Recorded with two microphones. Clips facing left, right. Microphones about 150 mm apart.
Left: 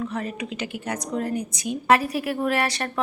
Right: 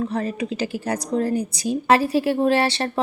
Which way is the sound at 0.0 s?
35° right (ahead or behind).